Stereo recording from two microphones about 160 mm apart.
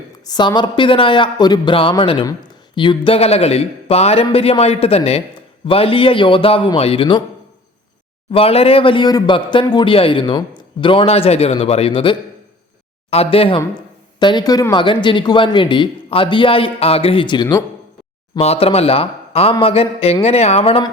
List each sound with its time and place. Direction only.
0.3 s speech: 25° left (ahead or behind)
8.3 s speech: 40° left (ahead or behind)
18.3 s speech: 40° left (ahead or behind)